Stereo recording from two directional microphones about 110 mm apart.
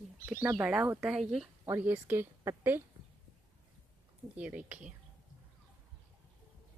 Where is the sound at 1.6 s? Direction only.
20° right (ahead or behind).